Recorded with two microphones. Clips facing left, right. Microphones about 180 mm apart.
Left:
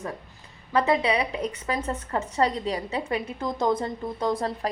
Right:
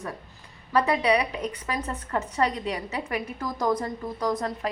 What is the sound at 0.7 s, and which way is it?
A woman's voice, 25° left (ahead or behind).